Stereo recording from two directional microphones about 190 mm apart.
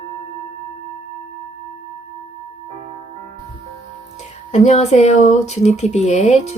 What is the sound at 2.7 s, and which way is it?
Music, 40° right (ahead or behind).